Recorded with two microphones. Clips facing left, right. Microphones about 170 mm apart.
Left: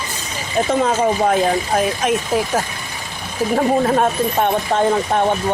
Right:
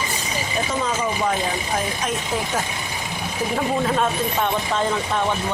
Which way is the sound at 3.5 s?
50° left (ahead or behind).